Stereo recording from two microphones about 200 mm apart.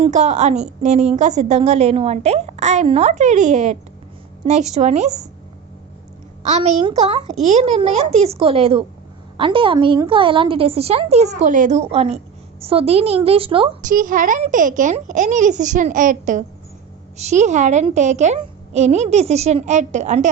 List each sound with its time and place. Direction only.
0.0 s a woman's voice: 35° right (ahead or behind)
6.4 s a woman's voice: 35° right (ahead or behind)
13.8 s a woman's voice: 40° right (ahead or behind)